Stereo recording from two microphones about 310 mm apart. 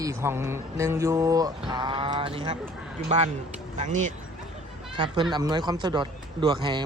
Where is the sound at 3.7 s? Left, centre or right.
Right.